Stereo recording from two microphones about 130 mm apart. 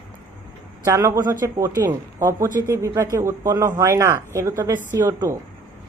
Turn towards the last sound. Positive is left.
turn(degrees=-25)  # may be behind; listen again after turning